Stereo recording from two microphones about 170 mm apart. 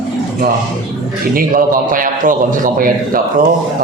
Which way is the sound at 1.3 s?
55° right (ahead or behind).